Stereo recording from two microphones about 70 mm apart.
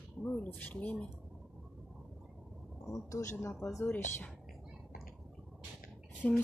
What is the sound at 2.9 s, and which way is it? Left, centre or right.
Speech, left.